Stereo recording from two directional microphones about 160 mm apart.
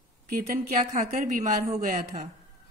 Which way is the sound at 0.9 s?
45° right (ahead or behind).